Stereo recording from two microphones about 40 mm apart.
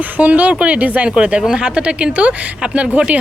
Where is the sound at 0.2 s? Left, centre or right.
Right.